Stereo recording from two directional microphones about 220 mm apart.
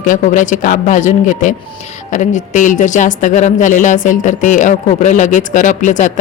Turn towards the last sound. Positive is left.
turn(degrees=35)  # may be behind; listen again after turning